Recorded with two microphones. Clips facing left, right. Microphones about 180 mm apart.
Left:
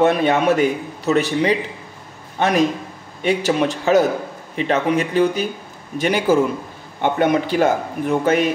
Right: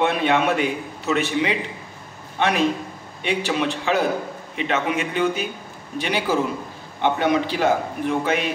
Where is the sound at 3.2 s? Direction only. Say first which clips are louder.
Left 5 dB; 40° left (ahead or behind).